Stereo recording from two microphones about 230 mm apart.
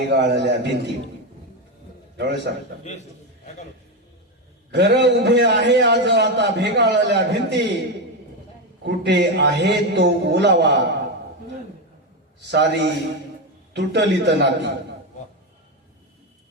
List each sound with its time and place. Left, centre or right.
0.1 s a man's voice: right
2.1 s a man's voice: right
4.7 s a man's voice: right
8.8 s a man's voice: right
12.5 s a man's voice: right